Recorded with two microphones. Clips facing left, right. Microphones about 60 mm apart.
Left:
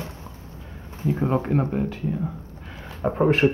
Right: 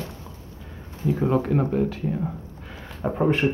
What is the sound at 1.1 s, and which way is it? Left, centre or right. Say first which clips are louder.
Speech: right 1 dB; centre.